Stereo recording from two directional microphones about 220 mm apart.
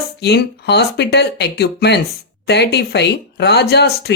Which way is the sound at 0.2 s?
50° left (ahead or behind).